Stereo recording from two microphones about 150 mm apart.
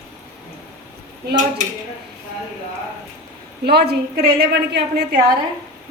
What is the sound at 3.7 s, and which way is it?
A woman's voice, 90° right.